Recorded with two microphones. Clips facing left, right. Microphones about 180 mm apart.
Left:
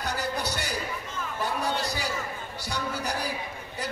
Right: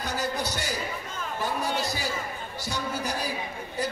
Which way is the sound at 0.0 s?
60° left (ahead or behind).